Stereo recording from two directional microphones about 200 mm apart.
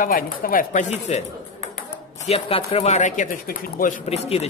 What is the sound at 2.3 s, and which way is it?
Speech, 30° left (ahead or behind).